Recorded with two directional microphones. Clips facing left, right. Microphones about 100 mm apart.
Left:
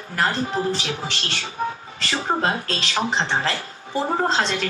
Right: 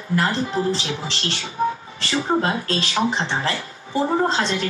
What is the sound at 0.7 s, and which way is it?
Speech, 30° right (ahead or behind).